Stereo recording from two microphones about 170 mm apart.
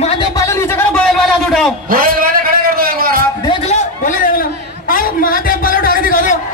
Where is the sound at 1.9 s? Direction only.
55° right (ahead or behind).